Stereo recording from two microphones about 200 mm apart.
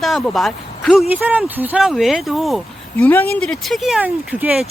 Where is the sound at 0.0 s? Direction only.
Centre (ahead or behind).